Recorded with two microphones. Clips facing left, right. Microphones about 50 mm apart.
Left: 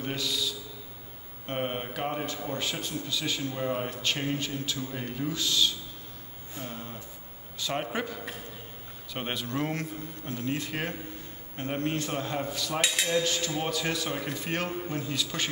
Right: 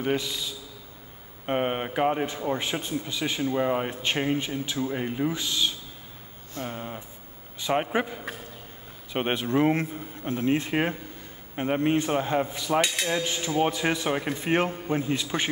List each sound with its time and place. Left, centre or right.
0.0 s a man's voice: right
12.8 s speech: centre
13.1 s a man's voice: right